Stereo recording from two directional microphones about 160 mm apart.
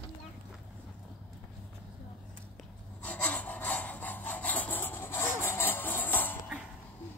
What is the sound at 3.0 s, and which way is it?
Wood, 10° left (ahead or behind).